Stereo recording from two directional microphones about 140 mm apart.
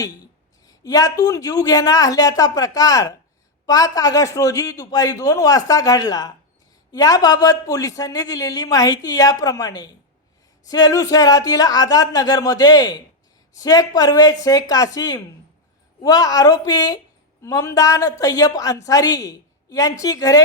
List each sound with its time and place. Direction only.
0.7 s a man's voice: 25° left (ahead or behind)